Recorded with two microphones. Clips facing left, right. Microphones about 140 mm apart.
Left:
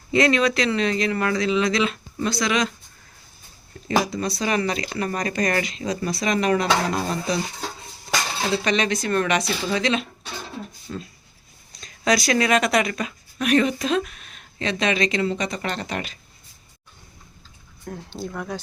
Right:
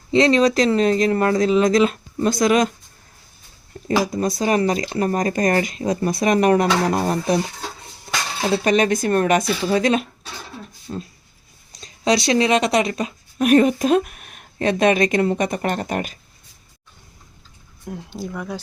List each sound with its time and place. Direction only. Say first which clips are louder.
0.1 s speech: right 4 dB; 30° right (ahead or behind); by 2.7 s 45° right (ahead or behind)
3.8 s speech: right 3 dB; 45° right (ahead or behind)
8.5 s speech: right 6 dB; 45° right (ahead or behind)
10.9 s speech: right 6 dB; 30° right (ahead or behind)
13.5 s speech: right 5 dB; 45° right (ahead or behind)
17.8 s speech: right 2 dB; 5° right (ahead or behind)